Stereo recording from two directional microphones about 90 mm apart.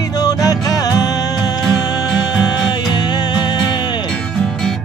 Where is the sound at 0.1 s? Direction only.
45° left (ahead or behind).